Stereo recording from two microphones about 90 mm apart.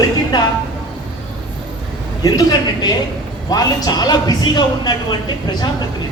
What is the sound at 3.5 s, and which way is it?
A man's voice, 45° left (ahead or behind).